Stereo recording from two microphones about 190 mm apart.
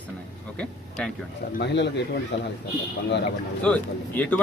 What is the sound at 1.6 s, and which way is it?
Speech, 65° left (ahead or behind).